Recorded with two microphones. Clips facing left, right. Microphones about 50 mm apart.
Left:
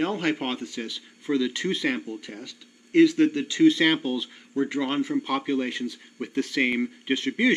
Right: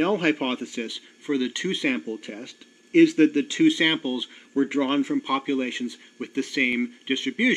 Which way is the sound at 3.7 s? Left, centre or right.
Centre.